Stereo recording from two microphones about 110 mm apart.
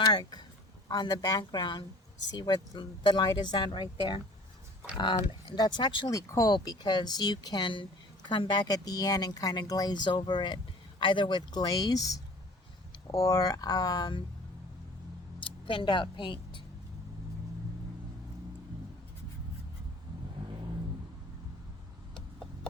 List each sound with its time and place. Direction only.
0.0 s a woman's voice: 40° left (ahead or behind)
5.5 s speech: 40° left (ahead or behind)
6.1 s a woman's voice: 30° left (ahead or behind)
6.5 s a woman's voice: 40° left (ahead or behind)
15.4 s a sound: 50° left (ahead or behind)